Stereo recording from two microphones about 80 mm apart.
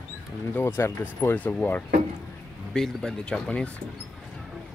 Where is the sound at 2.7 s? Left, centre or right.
Centre.